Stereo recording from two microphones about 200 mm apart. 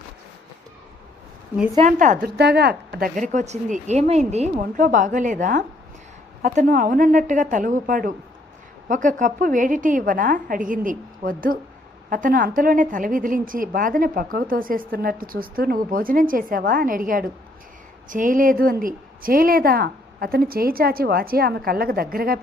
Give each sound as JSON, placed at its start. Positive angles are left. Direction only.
{"t": 1.9, "sound": "a woman's voice", "side_deg": -40}
{"t": 2.3, "sound": "a woman's voice", "side_deg": -55}
{"t": 3.2, "sound": "a woman's voice", "side_deg": -35}